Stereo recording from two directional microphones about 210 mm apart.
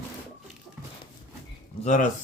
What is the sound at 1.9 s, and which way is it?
Speech, 40° left (ahead or behind).